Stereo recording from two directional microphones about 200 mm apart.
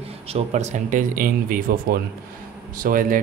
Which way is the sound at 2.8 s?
40° right (ahead or behind).